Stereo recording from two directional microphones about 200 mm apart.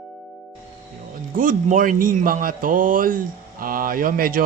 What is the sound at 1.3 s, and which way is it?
A man's voice, 40° right (ahead or behind).